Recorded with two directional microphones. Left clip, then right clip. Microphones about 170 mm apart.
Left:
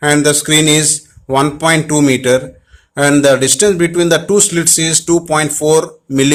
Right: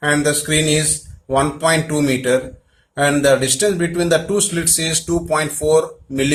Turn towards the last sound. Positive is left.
turn(degrees=40)  # may be behind; listen again after turning